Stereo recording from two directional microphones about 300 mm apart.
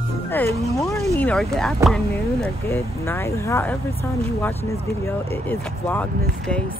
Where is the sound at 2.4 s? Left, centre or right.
Centre.